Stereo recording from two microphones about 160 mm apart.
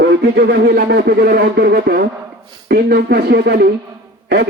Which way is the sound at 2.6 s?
85° right.